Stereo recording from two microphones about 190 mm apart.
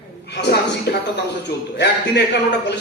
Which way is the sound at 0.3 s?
60° left (ahead or behind).